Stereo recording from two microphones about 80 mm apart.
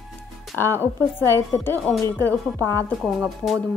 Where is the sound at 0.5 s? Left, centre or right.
Left.